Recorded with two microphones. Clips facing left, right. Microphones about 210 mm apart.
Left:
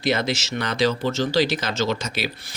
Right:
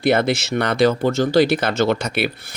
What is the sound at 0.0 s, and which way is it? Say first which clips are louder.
Speech: right 6 dB; 55° right (ahead or behind).